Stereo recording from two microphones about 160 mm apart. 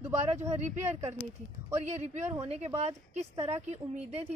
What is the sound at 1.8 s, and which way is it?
A woman's voice, 45° right (ahead or behind).